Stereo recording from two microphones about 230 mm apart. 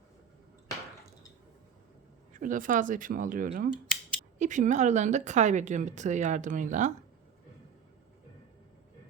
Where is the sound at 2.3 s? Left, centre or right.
Right.